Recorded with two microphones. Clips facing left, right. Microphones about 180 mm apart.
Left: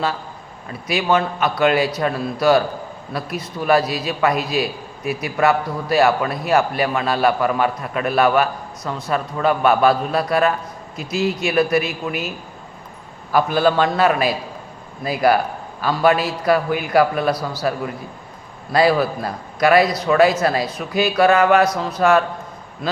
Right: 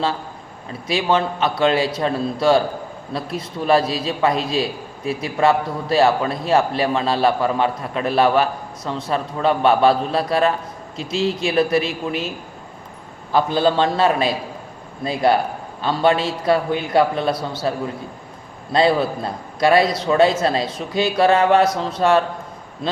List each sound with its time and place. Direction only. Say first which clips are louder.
0.7 s a man's voice: even; 25° right (ahead or behind)
13.3 s a man's voice: left 1 dB; 25° right (ahead or behind)